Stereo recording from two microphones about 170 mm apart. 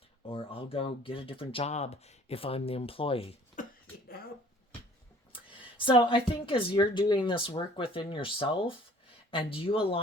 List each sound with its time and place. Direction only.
0.3 s speech: 35° left (ahead or behind)
3.6 s a sound: 50° left (ahead or behind)
5.3 s speech: 30° left (ahead or behind)